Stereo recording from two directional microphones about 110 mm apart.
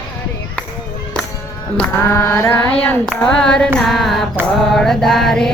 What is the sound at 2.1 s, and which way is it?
Mantra, 25° left (ahead or behind).